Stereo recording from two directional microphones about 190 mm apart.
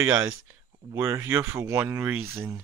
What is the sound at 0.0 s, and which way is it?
Speech, 10° right (ahead or behind).